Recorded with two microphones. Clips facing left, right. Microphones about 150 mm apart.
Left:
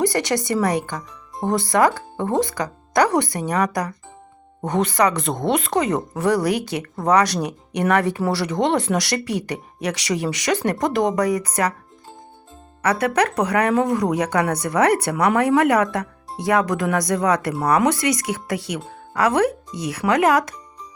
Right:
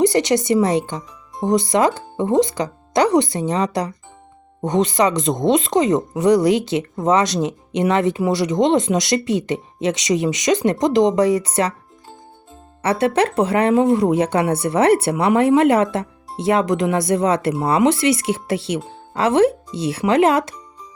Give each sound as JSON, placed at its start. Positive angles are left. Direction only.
{"t": 0.0, "sound": "speech", "side_deg": -20}
{"t": 12.8, "sound": "speech", "side_deg": -25}